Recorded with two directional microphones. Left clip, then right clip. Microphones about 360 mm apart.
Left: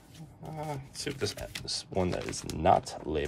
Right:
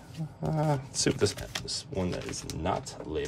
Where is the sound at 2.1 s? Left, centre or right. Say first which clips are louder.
Left 1 dB; centre.